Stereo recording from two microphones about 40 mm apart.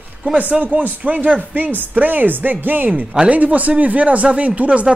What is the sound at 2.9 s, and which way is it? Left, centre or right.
Speech, right.